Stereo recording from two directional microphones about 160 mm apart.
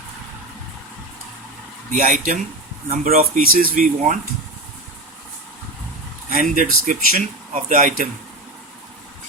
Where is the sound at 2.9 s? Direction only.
65° right (ahead or behind).